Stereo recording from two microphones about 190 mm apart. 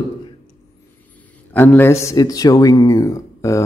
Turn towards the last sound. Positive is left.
turn(degrees=15)  # may be behind; listen again after turning